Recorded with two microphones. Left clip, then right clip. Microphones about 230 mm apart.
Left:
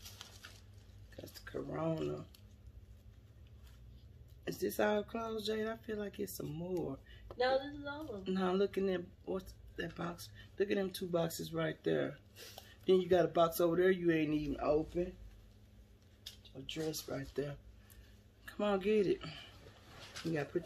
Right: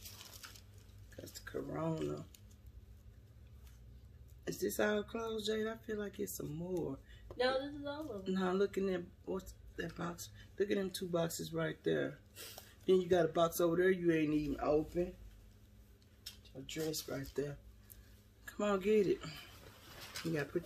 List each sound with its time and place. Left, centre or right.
1.2 s a sound: centre
4.5 s speech: centre
7.3 s a woman's voice: right
8.2 s speech: centre
16.6 s speech: centre
17.1 s speech: centre
20.5 s speech: centre